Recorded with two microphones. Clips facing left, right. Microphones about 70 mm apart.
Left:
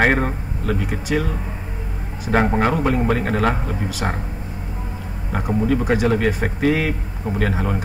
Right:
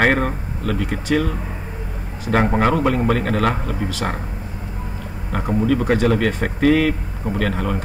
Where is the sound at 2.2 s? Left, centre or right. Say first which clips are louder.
Right 1 dB; centre.